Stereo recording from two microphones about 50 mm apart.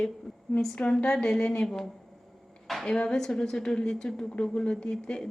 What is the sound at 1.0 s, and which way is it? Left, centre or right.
Speech, centre.